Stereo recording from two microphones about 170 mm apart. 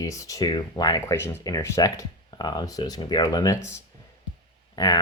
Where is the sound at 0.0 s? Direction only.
20° left (ahead or behind).